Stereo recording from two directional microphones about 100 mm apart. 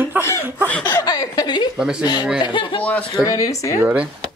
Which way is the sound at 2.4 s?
55° left (ahead or behind).